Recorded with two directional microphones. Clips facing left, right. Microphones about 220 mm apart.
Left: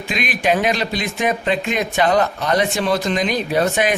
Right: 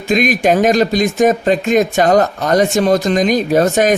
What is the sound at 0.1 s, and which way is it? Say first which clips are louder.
Speech: right 7 dB; 45° right (ahead or behind).